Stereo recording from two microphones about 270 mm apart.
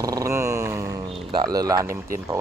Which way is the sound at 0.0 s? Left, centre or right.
Centre.